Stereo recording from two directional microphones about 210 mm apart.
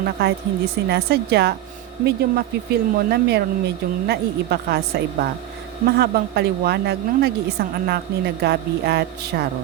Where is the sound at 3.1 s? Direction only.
50° right (ahead or behind).